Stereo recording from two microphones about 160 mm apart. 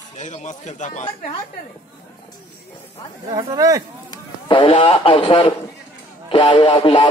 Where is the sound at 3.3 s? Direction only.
20° right (ahead or behind).